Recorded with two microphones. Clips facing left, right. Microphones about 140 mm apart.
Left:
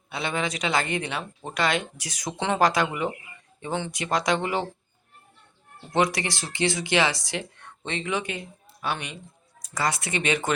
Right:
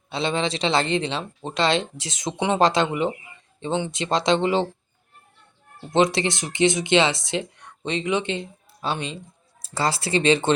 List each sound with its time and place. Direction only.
0.1 s speech: 25° right (ahead or behind)
5.9 s speech: 25° right (ahead or behind)